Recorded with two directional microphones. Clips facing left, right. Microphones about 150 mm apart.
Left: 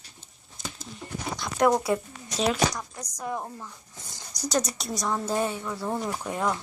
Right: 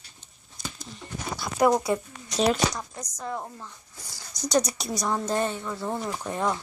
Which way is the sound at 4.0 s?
20° left (ahead or behind).